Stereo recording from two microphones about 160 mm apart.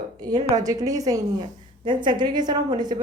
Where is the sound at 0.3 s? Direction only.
25° right (ahead or behind).